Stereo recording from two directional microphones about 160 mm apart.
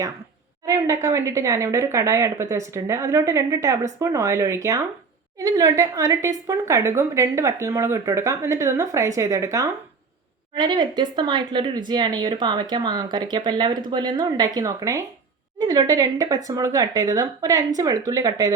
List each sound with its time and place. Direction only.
0.6 s speech: 20° right (ahead or behind)